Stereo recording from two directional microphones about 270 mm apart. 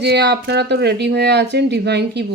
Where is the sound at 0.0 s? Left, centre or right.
Right.